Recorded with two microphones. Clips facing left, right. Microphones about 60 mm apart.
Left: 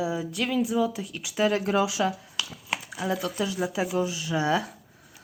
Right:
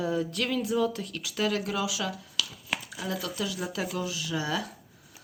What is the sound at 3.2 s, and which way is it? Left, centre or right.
Speech, left.